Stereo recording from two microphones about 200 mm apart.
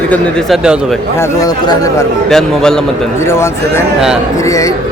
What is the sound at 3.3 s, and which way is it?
Speech, 15° left (ahead or behind).